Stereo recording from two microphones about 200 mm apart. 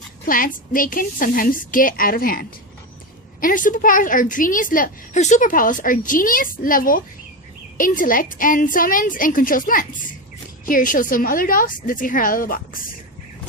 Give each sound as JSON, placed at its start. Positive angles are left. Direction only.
{"t": 0.3, "sound": "a woman's voice", "side_deg": 45}